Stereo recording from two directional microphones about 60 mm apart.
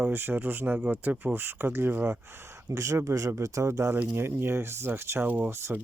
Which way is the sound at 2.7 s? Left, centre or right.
Right.